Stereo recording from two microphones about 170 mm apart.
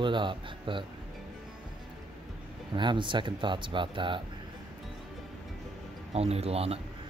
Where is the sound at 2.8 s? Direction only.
25° right (ahead or behind).